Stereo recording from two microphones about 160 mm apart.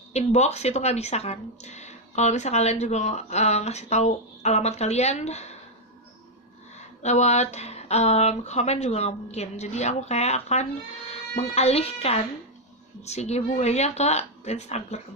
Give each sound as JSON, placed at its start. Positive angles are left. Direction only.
{"t": 0.1, "sound": "speech", "side_deg": 45}
{"t": 7.0, "sound": "speech", "side_deg": 45}